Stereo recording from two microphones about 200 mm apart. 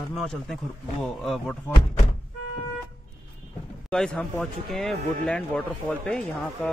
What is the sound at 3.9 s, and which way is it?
Speech, 5° left (ahead or behind).